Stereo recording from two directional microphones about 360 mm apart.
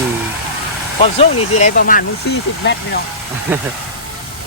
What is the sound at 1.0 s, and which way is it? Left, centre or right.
Speech, centre.